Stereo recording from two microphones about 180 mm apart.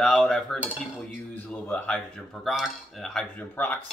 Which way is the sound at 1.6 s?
10° left (ahead or behind).